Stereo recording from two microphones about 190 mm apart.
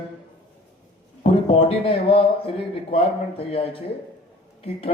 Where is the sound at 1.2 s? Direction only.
30° left (ahead or behind).